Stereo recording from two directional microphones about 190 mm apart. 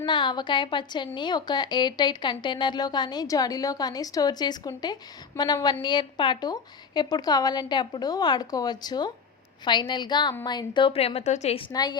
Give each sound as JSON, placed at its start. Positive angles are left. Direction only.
{"t": 0.0, "sound": "a woman's voice", "side_deg": 25}
{"t": 11.7, "sound": "a woman's voice", "side_deg": 20}